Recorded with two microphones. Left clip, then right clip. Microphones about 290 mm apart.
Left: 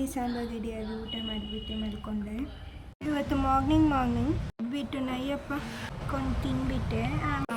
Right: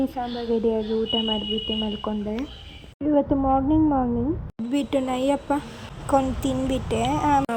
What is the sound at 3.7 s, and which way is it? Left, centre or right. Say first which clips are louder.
Speech: right 5 dB; centre.